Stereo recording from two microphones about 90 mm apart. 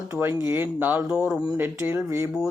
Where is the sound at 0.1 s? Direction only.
30° right (ahead or behind).